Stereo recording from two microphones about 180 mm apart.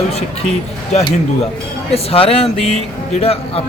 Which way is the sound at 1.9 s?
30° left (ahead or behind).